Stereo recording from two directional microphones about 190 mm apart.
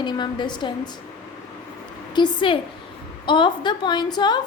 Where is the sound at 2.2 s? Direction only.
25° left (ahead or behind).